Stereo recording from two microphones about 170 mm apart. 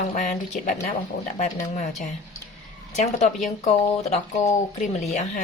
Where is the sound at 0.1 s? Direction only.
45° left (ahead or behind).